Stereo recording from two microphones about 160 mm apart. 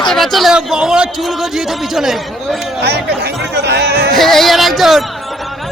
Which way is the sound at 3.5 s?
90° right.